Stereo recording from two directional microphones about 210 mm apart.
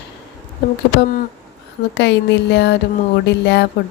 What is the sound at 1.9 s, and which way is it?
A woman's voice, 55° left (ahead or behind).